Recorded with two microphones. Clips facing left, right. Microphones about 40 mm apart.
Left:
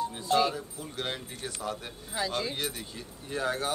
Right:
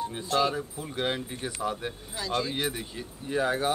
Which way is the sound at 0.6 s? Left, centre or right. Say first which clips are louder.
Right 5 dB; centre.